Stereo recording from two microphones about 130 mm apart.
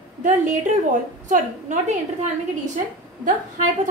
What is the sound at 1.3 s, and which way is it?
Speech, 70° right (ahead or behind).